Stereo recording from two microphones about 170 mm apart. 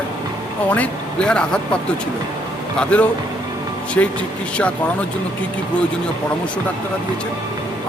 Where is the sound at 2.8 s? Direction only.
10° left (ahead or behind).